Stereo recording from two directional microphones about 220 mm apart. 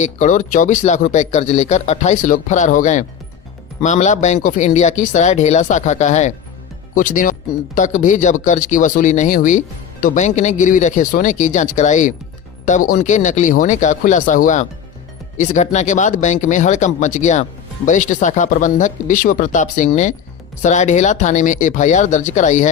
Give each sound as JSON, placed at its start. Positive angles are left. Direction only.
{"t": 0.0, "sound": "speech", "side_deg": 35}